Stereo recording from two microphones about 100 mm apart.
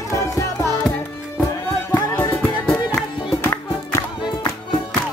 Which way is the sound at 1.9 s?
20° left (ahead or behind).